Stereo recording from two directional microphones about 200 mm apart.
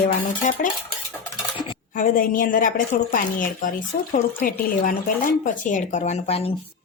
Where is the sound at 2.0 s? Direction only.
45° left (ahead or behind).